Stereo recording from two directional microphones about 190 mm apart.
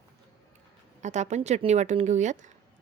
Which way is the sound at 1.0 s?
40° right (ahead or behind).